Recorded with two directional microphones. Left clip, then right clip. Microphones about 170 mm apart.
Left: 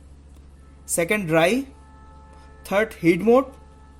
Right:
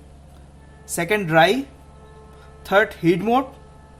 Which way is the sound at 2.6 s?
20° left (ahead or behind).